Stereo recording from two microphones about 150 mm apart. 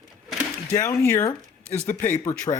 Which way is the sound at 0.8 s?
20° left (ahead or behind).